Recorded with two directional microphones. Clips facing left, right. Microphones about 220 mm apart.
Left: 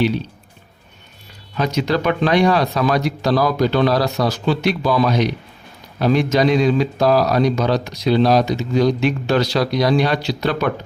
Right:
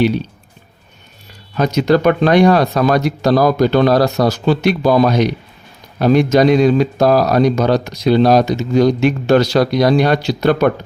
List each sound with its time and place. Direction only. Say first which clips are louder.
1.5 s speech: right 6 dB; 45° right (ahead or behind)